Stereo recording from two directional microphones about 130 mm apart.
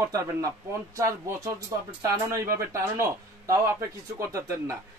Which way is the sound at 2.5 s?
20° right (ahead or behind).